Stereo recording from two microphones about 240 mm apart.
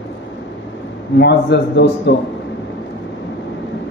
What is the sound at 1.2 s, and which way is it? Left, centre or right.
Speech, left.